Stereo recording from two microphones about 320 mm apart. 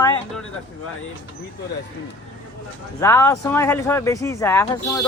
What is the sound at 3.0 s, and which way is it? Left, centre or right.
Speech, centre.